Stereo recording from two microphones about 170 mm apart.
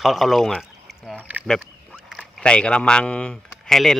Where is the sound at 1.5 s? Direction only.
Centre (ahead or behind).